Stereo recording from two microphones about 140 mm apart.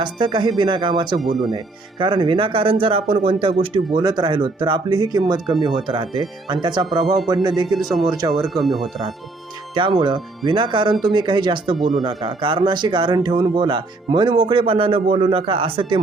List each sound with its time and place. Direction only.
0.0 s speech: 35° right (ahead or behind)
1.2 s speech: centre (ahead or behind)
1.5 s speech: 35° right (ahead or behind)
7.7 s speech: centre (ahead or behind)
9.8 s speech: 35° right (ahead or behind)
11.8 s speech: centre (ahead or behind)
12.0 s speech: 35° right (ahead or behind)